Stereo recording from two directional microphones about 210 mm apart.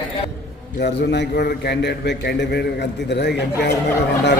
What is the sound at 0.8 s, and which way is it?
A man's voice, 55° left (ahead or behind).